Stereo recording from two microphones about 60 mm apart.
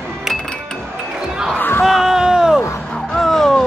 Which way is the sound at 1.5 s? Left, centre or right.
Left.